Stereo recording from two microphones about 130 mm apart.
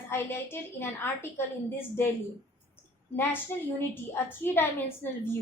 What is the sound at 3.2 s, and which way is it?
A woman's voice, 15° left (ahead or behind).